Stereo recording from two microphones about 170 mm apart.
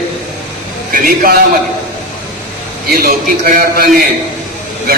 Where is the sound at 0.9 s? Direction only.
55° right (ahead or behind).